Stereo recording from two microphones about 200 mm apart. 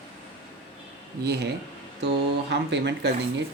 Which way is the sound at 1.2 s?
55° right (ahead or behind).